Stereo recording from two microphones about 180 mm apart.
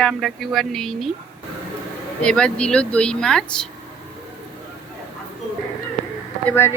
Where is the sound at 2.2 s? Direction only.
5° left (ahead or behind).